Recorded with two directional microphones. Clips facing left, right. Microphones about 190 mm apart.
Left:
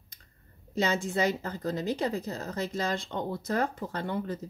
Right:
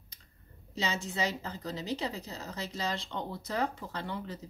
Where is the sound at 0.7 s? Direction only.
50° left (ahead or behind).